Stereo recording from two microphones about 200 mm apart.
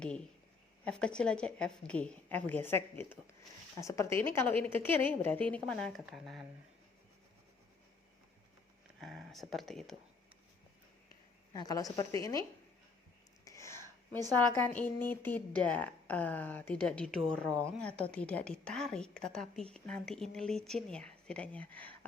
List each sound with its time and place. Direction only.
0.9 s a woman's voice: 5° left (ahead or behind)
9.0 s a woman's voice: centre (ahead or behind)
11.5 s a woman's voice: 20° left (ahead or behind)
13.4 s whispering: 15° left (ahead or behind)
14.3 s a woman's voice: 10° left (ahead or behind)